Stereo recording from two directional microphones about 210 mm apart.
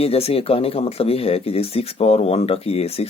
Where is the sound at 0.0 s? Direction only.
30° left (ahead or behind).